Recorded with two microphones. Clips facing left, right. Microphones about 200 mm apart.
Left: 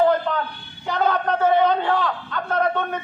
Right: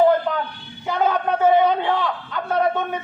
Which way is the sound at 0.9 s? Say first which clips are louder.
Right 1 dB; 5° right (ahead or behind).